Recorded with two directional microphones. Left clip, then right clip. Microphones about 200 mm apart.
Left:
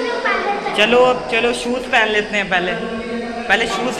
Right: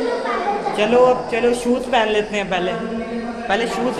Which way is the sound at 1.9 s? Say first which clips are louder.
Left 4 dB; 25° right (ahead or behind).